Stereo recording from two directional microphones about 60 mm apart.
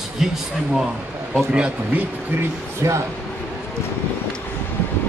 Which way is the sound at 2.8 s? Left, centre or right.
Right.